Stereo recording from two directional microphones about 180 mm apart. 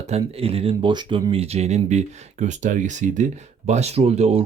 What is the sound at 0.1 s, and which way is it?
Speech, 30° right (ahead or behind).